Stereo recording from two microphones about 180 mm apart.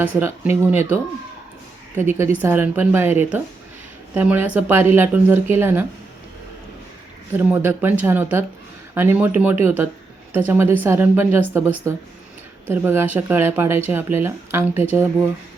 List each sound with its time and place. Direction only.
0.0 s speech: 10° right (ahead or behind)
2.0 s speech: 15° right (ahead or behind)
7.3 s speech: 10° right (ahead or behind)